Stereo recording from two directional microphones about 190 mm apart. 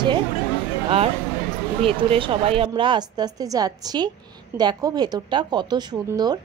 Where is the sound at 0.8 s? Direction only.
30° right (ahead or behind).